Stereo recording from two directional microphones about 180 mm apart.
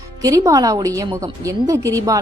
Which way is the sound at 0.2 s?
20° right (ahead or behind).